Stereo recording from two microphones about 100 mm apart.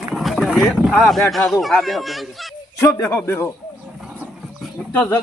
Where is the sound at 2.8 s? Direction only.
35° left (ahead or behind).